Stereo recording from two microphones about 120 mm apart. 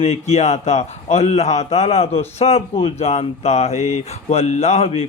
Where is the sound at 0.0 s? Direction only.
65° left (ahead or behind).